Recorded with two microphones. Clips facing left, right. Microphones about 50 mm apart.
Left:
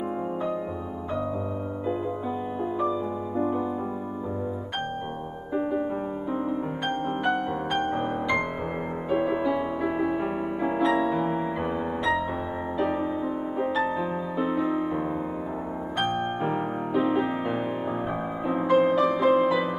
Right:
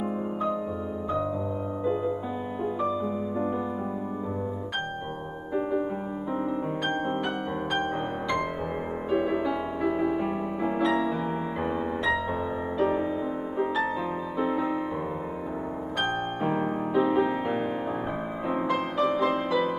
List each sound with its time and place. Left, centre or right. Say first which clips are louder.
5.5 s music: even; centre
9.1 s music: left 2 dB; centre
14.4 s music: left 1 dB; centre
16.0 s music: left 2 dB; centre
18.8 s music: left 4 dB; centre